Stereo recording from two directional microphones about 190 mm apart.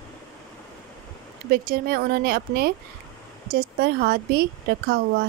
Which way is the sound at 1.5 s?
50° right (ahead or behind).